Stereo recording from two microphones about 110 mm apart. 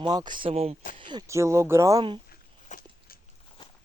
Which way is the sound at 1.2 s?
25° right (ahead or behind).